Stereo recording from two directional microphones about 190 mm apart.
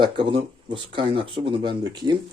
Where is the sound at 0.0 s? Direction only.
25° right (ahead or behind).